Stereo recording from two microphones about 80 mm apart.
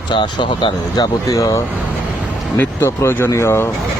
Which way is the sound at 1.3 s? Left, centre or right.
Left.